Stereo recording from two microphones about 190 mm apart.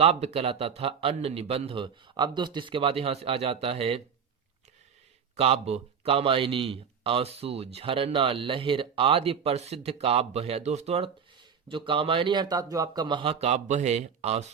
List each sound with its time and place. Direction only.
0.0 s a man's voice: 35° right (ahead or behind)
5.4 s a man's voice: 30° right (ahead or behind)